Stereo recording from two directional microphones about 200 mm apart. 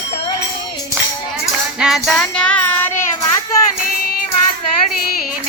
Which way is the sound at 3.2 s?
20° left (ahead or behind).